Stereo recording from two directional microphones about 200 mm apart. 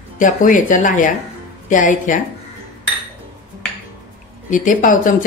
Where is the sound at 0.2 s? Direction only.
40° left (ahead or behind).